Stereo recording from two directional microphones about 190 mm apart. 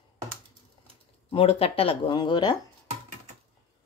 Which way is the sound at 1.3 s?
30° left (ahead or behind).